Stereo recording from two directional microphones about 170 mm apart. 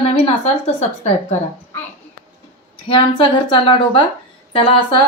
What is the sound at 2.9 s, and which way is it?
Speech, 30° left (ahead or behind).